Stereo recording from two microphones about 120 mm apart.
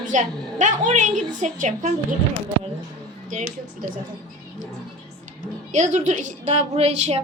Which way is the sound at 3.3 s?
90° right.